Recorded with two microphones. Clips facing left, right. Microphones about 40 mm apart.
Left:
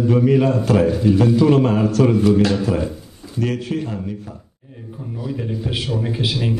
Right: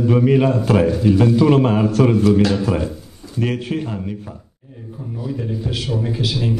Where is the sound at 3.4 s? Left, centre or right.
Right.